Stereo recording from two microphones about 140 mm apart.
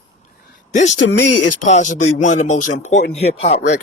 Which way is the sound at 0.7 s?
60° left (ahead or behind).